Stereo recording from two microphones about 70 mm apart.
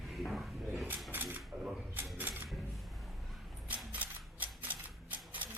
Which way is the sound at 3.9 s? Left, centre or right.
Right.